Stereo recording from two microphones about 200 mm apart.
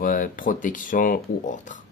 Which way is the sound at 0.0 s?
40° left (ahead or behind).